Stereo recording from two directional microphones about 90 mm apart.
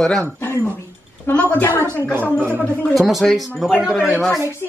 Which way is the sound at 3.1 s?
Centre (ahead or behind).